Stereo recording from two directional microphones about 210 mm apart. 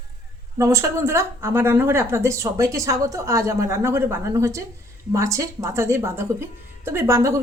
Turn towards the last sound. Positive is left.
turn(degrees=-15)  # may be behind; listen again after turning